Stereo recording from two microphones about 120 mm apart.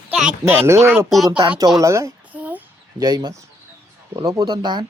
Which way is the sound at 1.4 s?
40° right (ahead or behind).